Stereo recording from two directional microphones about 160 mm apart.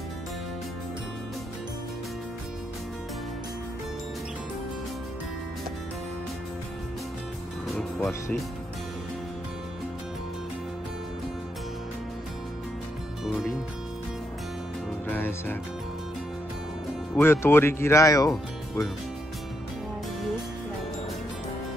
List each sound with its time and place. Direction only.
8.0 s speech: 15° left (ahead or behind)
15.0 s music: 15° left (ahead or behind)
17.1 s speech: 15° left (ahead or behind)